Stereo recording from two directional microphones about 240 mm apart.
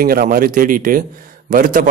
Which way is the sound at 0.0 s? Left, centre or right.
Right.